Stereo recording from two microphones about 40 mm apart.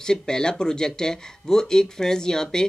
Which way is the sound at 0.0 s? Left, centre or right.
Centre.